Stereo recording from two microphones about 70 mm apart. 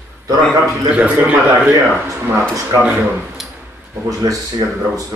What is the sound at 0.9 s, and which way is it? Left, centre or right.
Speech, centre.